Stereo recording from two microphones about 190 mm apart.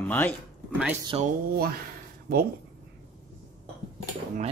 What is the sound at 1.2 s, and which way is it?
Speech, 55° right (ahead or behind).